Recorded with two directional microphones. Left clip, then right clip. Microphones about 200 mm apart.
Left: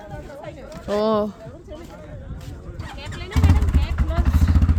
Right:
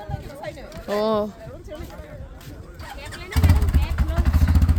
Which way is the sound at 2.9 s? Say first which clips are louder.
Left 1 dB; 35° left (ahead or behind).